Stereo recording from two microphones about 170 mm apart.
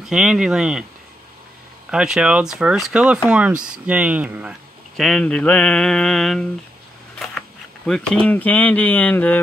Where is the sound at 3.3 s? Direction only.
5° right (ahead or behind).